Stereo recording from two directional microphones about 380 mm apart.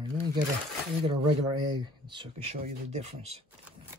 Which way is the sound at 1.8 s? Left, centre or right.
Centre.